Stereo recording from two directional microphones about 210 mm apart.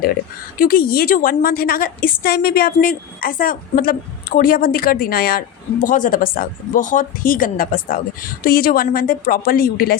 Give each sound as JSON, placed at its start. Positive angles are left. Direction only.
{"t": 0.6, "sound": "a woman's voice", "side_deg": 45}